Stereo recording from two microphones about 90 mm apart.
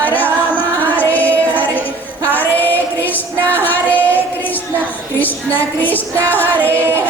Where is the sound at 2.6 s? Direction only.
20° left (ahead or behind).